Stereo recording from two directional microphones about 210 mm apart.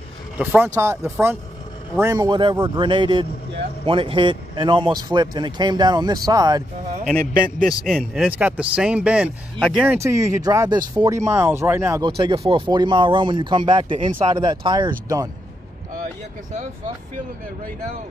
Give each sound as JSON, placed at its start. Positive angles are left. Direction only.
{"t": 0.4, "sound": "a man's voice", "side_deg": -10}
{"t": 7.6, "sound": "speech", "side_deg": 0}
{"t": 9.8, "sound": "speech", "side_deg": -15}
{"t": 12.2, "sound": "a man's voice", "side_deg": -20}